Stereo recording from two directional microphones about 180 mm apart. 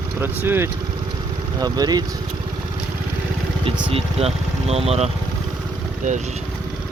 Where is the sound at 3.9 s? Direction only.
30° right (ahead or behind).